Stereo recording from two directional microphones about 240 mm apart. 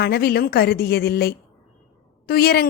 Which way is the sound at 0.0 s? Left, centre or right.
Left.